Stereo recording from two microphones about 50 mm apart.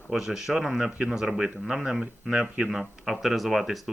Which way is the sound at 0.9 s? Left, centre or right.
Centre.